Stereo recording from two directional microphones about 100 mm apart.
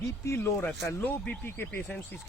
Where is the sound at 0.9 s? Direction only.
20° left (ahead or behind).